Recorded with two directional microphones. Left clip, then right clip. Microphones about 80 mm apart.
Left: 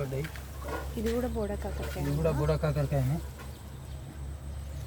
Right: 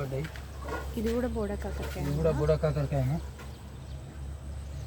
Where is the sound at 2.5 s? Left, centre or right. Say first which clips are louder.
Right 3 dB; centre.